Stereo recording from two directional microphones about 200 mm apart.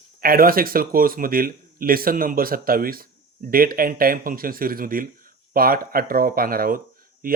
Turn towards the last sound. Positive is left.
turn(degrees=-45)  # may be behind; listen again after turning